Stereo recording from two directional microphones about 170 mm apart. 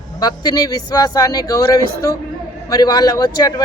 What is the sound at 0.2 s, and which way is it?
A man's voice, 25° left (ahead or behind).